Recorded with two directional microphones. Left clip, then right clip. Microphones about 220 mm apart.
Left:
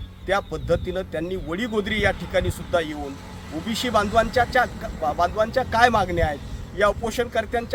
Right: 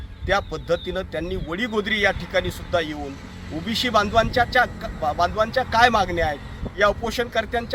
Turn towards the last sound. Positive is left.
turn(degrees=5)  # may be behind; listen again after turning